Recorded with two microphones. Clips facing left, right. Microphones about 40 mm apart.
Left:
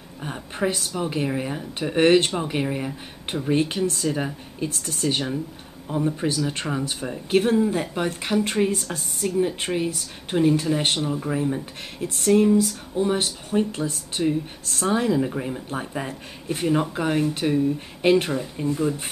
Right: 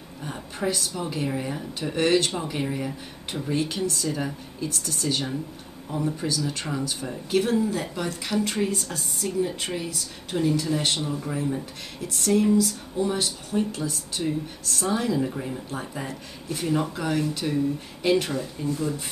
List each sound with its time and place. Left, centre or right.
0.2 s speech: left
5.9 s speech: centre
6.2 s speech: left
11.1 s speech: centre